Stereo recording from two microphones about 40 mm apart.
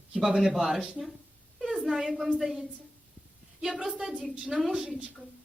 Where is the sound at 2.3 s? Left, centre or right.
Centre.